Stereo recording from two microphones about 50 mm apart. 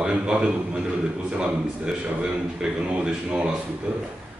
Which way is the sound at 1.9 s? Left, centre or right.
Centre.